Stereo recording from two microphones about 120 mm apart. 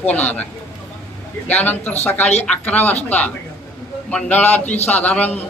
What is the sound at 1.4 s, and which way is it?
Speech, 15° left (ahead or behind).